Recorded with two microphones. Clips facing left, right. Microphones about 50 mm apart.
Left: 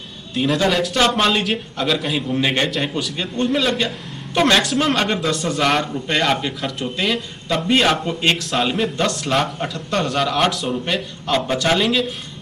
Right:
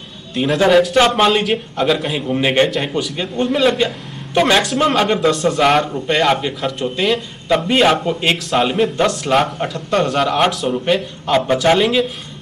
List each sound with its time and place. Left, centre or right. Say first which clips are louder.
0.3 s a man's voice: right 5 dB; centre
2.7 s a man's voice: right 3 dB; centre